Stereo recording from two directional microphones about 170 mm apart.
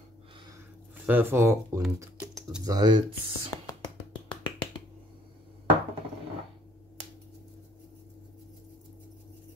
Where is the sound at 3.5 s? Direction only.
20° left (ahead or behind).